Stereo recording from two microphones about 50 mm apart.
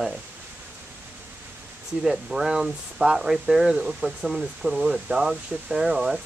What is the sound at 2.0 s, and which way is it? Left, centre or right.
Speech, centre.